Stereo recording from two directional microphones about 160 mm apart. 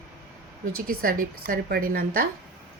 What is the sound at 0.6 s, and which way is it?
A woman's voice, 65° right (ahead or behind).